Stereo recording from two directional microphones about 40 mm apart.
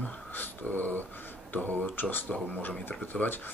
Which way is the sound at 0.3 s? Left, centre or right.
Left.